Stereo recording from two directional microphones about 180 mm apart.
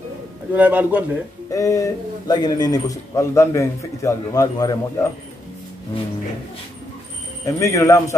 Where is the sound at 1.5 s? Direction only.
20° left (ahead or behind).